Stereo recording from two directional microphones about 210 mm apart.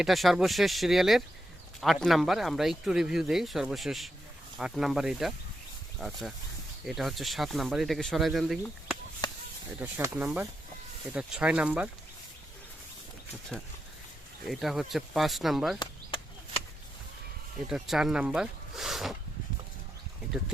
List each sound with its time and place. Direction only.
0.0 s speech: centre (ahead or behind)
9.2 s a sound: 20° left (ahead or behind)
9.8 s speech: 10° right (ahead or behind)
14.4 s speech: centre (ahead or behind)
15.8 s a sound: 25° left (ahead or behind)
17.7 s speech: centre (ahead or behind)